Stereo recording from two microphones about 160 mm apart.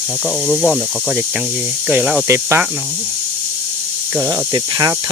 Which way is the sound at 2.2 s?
15° right (ahead or behind).